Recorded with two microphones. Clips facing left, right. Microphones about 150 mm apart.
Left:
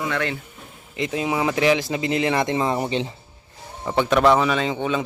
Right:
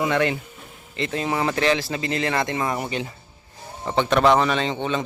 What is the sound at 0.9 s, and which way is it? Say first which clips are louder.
Speech: left 1 dB; 10° left (ahead or behind).